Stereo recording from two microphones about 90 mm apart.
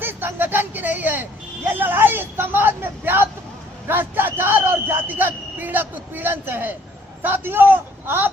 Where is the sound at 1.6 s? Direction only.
20° right (ahead or behind).